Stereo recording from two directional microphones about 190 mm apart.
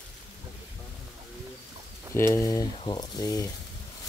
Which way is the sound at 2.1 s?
15° left (ahead or behind).